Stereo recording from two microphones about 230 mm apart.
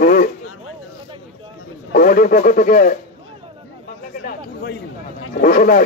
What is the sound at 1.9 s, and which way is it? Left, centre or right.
A man's voice, left.